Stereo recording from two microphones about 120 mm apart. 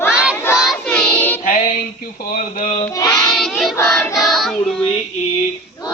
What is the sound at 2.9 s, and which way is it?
Child singing, 30° left (ahead or behind).